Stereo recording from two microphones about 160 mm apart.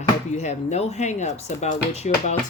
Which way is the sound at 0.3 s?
45° left (ahead or behind).